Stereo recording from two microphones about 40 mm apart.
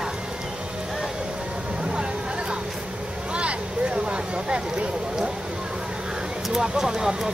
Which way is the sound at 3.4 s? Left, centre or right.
Right.